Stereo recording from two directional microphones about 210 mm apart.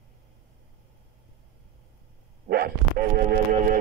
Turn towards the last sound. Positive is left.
turn(degrees=-40)  # may be behind; listen again after turning